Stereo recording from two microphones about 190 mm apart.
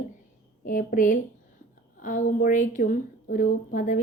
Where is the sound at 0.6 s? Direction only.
50° left (ahead or behind).